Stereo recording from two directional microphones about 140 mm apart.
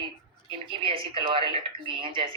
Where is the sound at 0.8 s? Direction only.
40° right (ahead or behind).